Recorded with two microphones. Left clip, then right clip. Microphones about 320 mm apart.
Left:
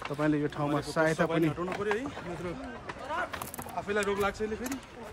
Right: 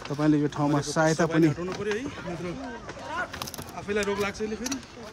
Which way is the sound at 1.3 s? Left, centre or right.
Left.